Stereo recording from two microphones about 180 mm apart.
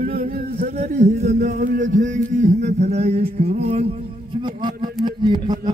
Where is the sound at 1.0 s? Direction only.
40° right (ahead or behind).